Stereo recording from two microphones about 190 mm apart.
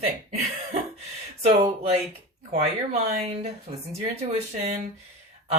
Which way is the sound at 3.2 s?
35° right (ahead or behind).